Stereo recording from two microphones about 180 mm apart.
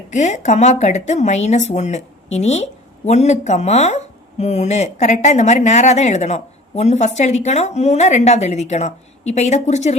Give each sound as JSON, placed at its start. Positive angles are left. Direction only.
{"t": 0.1, "sound": "speech", "side_deg": 40}